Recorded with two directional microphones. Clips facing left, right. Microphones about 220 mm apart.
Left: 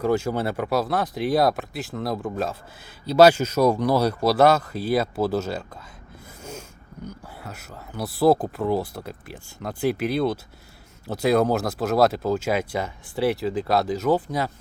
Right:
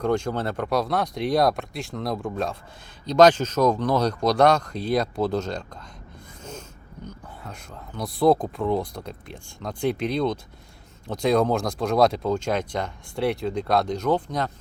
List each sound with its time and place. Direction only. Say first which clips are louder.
0.0 s speech: left 1 dB; 5° left (ahead or behind)